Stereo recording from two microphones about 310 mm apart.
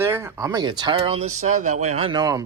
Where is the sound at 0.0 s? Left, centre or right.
Centre.